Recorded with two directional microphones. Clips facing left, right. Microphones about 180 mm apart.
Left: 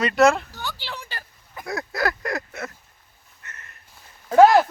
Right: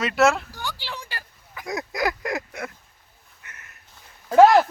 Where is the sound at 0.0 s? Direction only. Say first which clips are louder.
Left 2 dB; centre (ahead or behind).